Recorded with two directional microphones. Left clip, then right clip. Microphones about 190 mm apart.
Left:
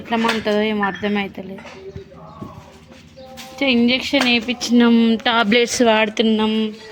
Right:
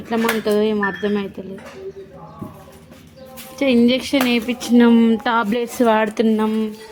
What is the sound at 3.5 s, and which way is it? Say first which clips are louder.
Speech: right 1 dB; 15° right (ahead or behind).